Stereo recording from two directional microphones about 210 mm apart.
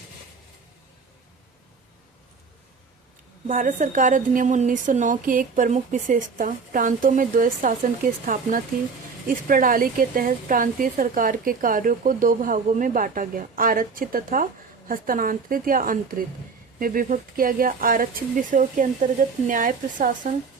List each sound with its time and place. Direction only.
3.4 s a woman's voice: 40° right (ahead or behind)